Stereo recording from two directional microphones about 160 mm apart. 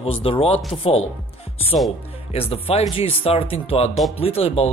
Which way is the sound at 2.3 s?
35° left (ahead or behind).